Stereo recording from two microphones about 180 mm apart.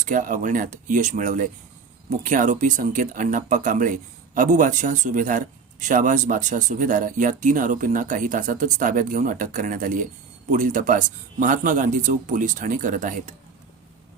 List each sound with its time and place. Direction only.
0.0 s speech: 50° right (ahead or behind)